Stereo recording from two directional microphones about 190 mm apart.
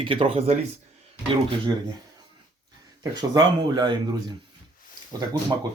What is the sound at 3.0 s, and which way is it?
Speech, 20° right (ahead or behind).